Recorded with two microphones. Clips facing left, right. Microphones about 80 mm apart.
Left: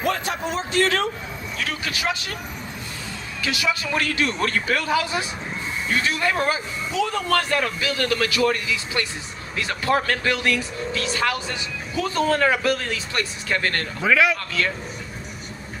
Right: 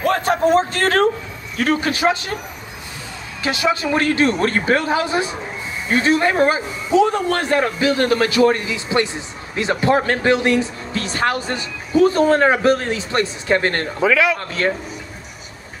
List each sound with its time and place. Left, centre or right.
0.1 s a man's voice: right
3.4 s speech: right
14.0 s a man's voice: centre
14.6 s speech: right